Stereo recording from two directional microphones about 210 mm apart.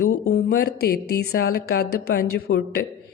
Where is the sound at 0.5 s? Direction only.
45° left (ahead or behind).